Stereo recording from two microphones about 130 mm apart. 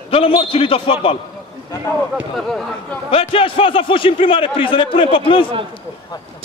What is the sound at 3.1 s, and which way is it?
A man's voice, 45° left (ahead or behind).